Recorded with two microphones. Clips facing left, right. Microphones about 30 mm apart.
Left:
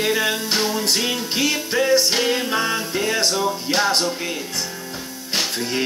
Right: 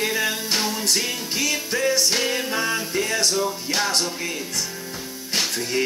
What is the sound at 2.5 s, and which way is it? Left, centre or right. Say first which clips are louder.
Music: left 2 dB; left.